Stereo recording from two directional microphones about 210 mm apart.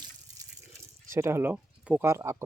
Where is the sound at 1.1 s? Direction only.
10° right (ahead or behind).